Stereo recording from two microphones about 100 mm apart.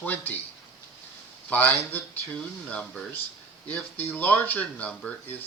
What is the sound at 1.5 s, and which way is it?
Speech, 15° left (ahead or behind).